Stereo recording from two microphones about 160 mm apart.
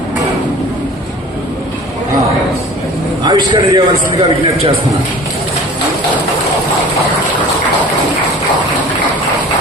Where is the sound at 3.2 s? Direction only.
25° right (ahead or behind).